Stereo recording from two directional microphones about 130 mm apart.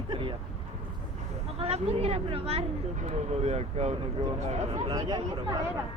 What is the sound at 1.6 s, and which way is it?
A woman's voice, 50° right (ahead or behind).